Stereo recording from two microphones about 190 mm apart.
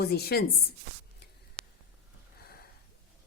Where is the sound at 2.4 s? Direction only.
55° left (ahead or behind).